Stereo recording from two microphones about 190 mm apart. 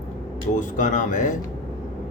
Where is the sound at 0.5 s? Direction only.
40° left (ahead or behind).